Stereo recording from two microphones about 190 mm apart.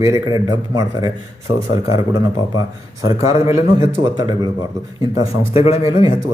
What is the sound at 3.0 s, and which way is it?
A man's voice, 15° right (ahead or behind).